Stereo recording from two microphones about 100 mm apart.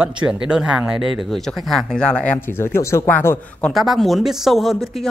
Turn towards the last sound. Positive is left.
turn(degrees=0)  # may be behind; listen again after turning